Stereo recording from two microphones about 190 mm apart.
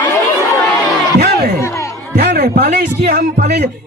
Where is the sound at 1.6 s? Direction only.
15° left (ahead or behind).